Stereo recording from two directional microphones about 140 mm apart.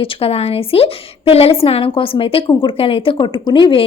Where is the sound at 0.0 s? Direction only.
40° left (ahead or behind).